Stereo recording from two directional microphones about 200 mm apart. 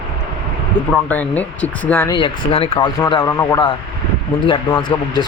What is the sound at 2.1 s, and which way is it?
Speech, 25° left (ahead or behind).